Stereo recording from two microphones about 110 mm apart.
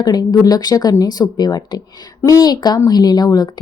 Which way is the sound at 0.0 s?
35° left (ahead or behind).